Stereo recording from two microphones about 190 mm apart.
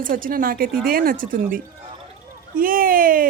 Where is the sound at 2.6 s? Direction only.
50° right (ahead or behind).